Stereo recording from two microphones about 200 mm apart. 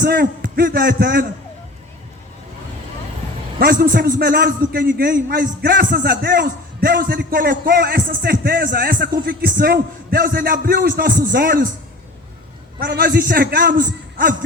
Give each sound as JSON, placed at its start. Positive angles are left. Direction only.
{"t": 0.0, "sound": "a man's voice", "side_deg": -50}
{"t": 3.6, "sound": "a man's voice", "side_deg": -50}
{"t": 12.8, "sound": "a man's voice", "side_deg": -55}